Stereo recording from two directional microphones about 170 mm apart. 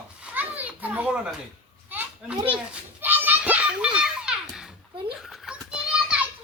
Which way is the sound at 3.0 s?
10° right (ahead or behind).